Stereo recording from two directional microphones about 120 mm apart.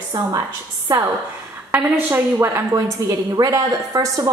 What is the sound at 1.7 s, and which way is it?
A woman's voice, 20° right (ahead or behind).